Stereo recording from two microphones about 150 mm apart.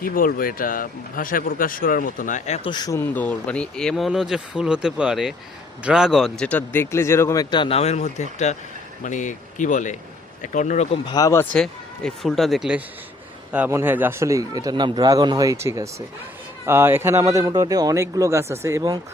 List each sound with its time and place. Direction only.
0.0 s speech: 70° left (ahead or behind)
2.6 s speech: 30° left (ahead or behind)
3.2 s speech: 10° left (ahead or behind)
7.5 s speech: 35° left (ahead or behind); by 10.8 s 55° left (ahead or behind)
11.1 s speech: 20° left (ahead or behind)
11.5 s speech: 5° left (ahead or behind); by 18.9 s 25° right (ahead or behind)